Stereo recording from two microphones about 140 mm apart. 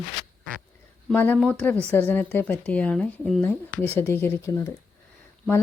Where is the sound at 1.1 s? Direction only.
10° left (ahead or behind).